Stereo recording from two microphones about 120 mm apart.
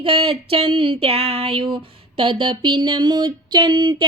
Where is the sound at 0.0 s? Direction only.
50° right (ahead or behind).